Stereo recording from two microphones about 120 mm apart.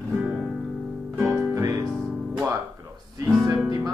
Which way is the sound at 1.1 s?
20° right (ahead or behind).